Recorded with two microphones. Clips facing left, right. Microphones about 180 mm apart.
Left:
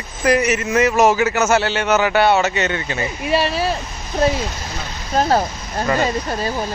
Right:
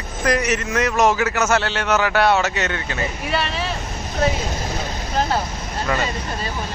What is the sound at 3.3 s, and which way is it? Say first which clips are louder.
Speech: left 8 dB; 35° left (ahead or behind).